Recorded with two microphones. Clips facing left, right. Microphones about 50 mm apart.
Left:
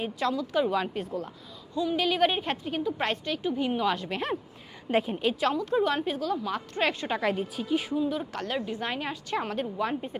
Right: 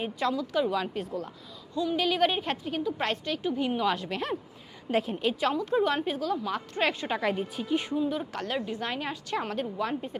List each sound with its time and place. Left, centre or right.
0.0 s speech: centre
0.5 s a woman's voice: centre
4.1 s a woman's voice: left
5.7 s a woman's voice: centre